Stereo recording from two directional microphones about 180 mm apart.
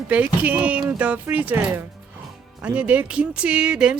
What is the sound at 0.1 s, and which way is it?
Speech, 10° right (ahead or behind).